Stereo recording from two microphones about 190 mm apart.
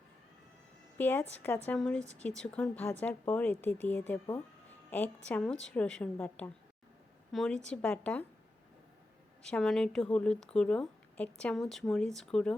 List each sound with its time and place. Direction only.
0.9 s a woman's voice: 10° left (ahead or behind)
9.5 s speech: centre (ahead or behind)